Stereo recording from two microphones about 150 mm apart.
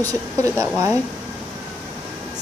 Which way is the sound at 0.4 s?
20° right (ahead or behind).